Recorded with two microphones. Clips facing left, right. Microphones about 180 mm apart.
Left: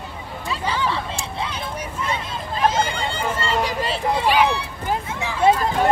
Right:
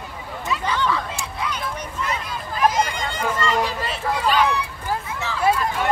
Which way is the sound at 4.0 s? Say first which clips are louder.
Left 1 dB; 25° left (ahead or behind).